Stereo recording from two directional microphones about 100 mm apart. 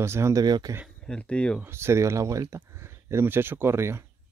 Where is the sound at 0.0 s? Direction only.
25° right (ahead or behind).